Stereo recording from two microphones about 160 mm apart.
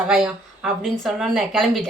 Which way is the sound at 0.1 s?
5° right (ahead or behind).